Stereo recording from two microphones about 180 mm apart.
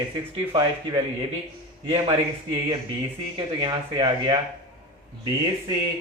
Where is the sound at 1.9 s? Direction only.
25° right (ahead or behind).